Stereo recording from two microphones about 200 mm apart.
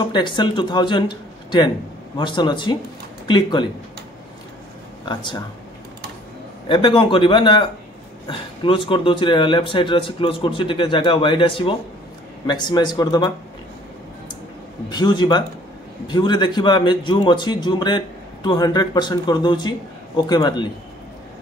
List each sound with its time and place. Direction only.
0.0 s a man's voice: 25° left (ahead or behind)
5.0 s a man's voice: 25° left (ahead or behind)
6.7 s a man's voice: 25° left (ahead or behind)
14.9 s a man's voice: 20° left (ahead or behind)